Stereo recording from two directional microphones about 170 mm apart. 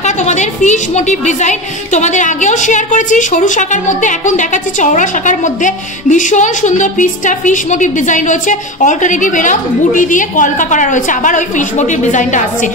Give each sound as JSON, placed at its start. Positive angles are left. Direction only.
{"t": 0.0, "sound": "a woman's voice", "side_deg": 45}